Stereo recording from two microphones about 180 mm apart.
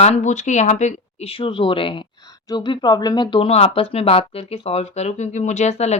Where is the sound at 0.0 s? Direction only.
40° left (ahead or behind).